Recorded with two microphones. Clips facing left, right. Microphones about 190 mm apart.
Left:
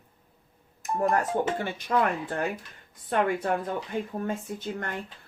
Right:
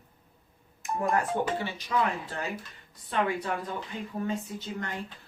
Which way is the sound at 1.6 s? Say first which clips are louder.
Left 3 dB; 55° left (ahead or behind).